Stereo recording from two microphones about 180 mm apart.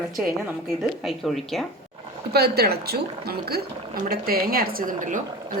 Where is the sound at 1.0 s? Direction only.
Centre (ahead or behind).